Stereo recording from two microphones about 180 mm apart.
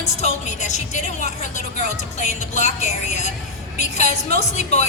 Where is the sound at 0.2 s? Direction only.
40° left (ahead or behind).